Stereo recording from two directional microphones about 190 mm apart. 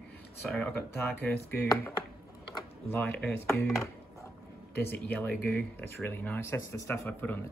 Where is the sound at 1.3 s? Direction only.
10° left (ahead or behind).